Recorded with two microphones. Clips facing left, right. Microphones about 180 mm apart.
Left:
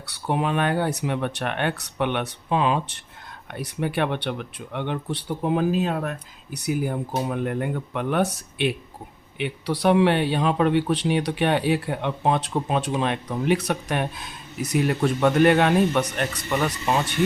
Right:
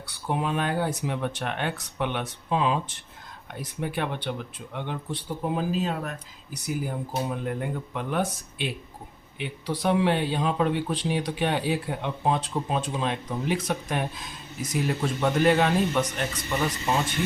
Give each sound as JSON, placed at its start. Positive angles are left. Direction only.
{"t": 0.0, "sound": "speech", "side_deg": 70}
{"t": 6.5, "sound": "speech", "side_deg": 65}